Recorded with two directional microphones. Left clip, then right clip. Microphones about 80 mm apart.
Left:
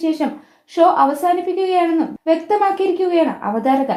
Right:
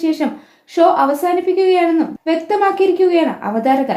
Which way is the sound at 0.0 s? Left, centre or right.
Left.